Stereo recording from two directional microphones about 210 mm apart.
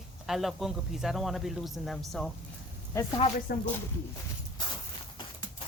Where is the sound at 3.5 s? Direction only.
45° left (ahead or behind).